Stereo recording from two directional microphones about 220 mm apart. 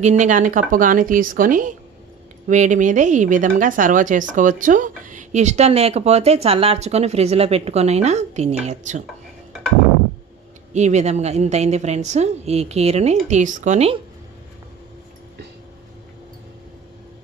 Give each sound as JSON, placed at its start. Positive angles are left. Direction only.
{"t": 0.2, "sound": "speech", "side_deg": -35}
{"t": 10.7, "sound": "speech", "side_deg": -30}